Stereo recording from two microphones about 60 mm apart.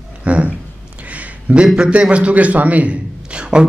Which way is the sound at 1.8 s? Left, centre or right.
Centre.